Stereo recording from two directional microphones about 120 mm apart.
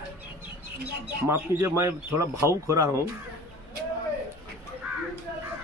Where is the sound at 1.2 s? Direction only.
20° right (ahead or behind).